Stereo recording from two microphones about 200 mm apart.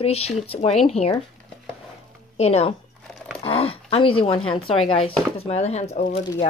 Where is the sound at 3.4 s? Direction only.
30° left (ahead or behind).